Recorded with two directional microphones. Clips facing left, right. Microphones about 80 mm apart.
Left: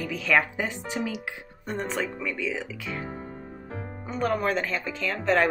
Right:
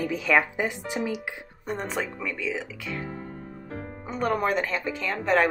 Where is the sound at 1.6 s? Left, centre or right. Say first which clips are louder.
Even; centre.